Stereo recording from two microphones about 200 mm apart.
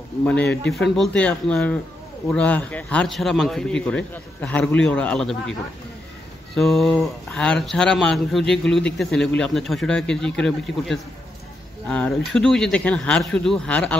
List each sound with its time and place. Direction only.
0.2 s speech: 5° left (ahead or behind)
6.5 s speech: centre (ahead or behind)